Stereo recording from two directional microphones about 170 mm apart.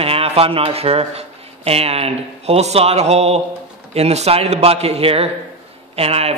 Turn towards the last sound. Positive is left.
turn(degrees=-35)  # may be behind; listen again after turning